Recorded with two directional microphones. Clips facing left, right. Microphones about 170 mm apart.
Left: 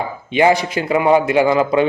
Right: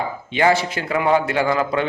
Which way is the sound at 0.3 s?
15° left (ahead or behind).